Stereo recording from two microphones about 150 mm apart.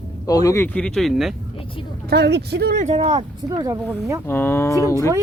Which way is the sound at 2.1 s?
90° right.